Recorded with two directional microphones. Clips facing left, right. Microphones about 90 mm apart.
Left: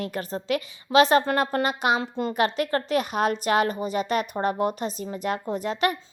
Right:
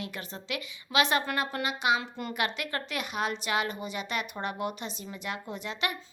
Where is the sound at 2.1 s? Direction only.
30° left (ahead or behind).